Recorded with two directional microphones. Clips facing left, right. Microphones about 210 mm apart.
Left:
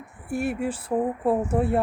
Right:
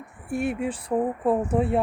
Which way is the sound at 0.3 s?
5° left (ahead or behind).